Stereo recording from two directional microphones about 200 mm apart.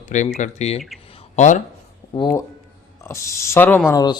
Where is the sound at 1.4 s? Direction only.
35° left (ahead or behind).